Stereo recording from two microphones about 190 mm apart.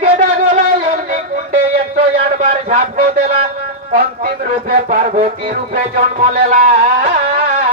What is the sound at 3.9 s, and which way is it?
Music, 45° right (ahead or behind).